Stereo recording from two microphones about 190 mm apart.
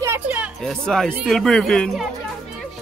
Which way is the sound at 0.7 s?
5° left (ahead or behind).